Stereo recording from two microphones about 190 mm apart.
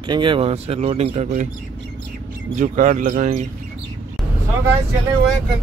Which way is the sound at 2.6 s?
40° right (ahead or behind).